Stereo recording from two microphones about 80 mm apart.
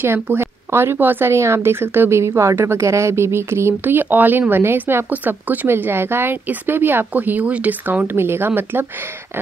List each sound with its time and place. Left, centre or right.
0.0 s speech: right